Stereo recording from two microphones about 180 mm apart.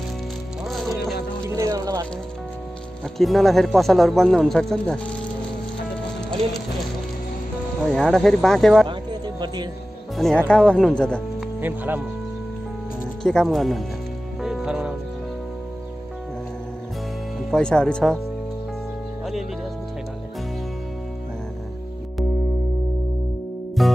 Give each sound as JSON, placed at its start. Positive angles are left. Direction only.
{"t": 0.7, "sound": "music", "side_deg": 0}
{"t": 1.6, "sound": "music", "side_deg": -20}
{"t": 3.2, "sound": "speech", "side_deg": 0}
{"t": 7.9, "sound": "speech", "side_deg": 5}
{"t": 8.8, "sound": "music", "side_deg": -25}
{"t": 10.1, "sound": "speech", "side_deg": 0}
{"t": 11.6, "sound": "speech", "side_deg": -10}
{"t": 13.2, "sound": "speech", "side_deg": 5}
{"t": 14.4, "sound": "music", "side_deg": -5}
{"t": 17.5, "sound": "speech", "side_deg": 5}
{"t": 23.8, "sound": "music", "side_deg": 0}